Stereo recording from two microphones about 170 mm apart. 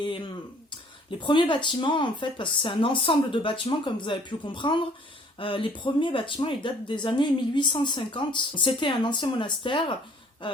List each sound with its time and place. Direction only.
1.2 s speech: 30° left (ahead or behind)